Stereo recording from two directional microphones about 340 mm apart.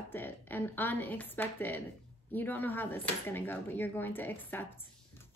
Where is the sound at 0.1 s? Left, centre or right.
Centre.